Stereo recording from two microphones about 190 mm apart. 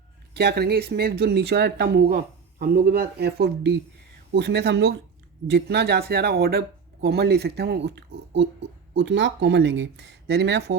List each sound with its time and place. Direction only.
0.3 s speech: 55° right (ahead or behind)